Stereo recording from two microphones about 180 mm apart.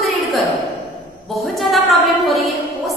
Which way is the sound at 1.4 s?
Centre (ahead or behind).